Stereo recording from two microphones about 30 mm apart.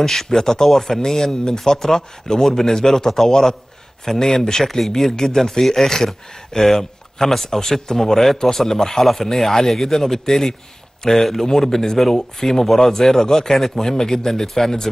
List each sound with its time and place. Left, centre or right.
0.0 s speech: centre
1.3 s speech: left
1.6 s speech: centre
2.0 s speech: left
4.6 s speech: centre
4.9 s speech: centre